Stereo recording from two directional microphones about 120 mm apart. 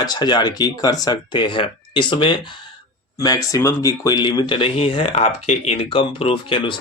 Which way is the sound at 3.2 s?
30° left (ahead or behind).